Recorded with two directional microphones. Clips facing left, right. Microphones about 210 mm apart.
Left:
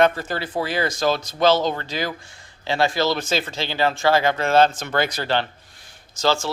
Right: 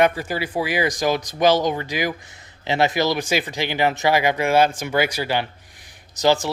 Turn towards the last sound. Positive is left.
turn(degrees=-15)  # may be behind; listen again after turning